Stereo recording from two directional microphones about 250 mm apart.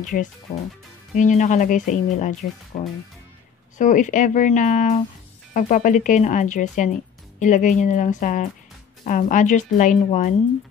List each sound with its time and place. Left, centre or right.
0.0 s speech: left